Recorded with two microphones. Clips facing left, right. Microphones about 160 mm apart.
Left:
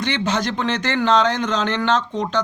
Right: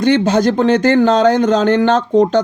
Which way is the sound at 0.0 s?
45° right (ahead or behind).